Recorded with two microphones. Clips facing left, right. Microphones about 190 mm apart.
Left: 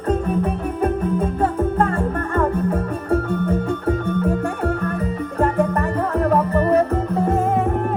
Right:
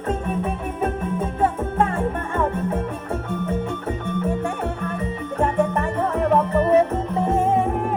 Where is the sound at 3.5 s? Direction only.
25° right (ahead or behind).